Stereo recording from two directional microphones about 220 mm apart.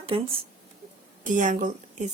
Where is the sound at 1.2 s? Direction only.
35° right (ahead or behind).